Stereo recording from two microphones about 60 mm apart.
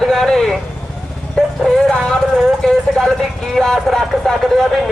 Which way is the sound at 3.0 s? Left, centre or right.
Centre.